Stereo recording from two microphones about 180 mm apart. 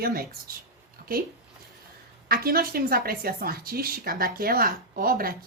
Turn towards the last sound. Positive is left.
turn(degrees=-55)  # may be behind; listen again after turning